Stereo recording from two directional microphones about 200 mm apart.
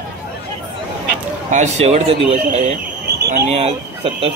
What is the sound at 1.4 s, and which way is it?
Speech, 35° right (ahead or behind).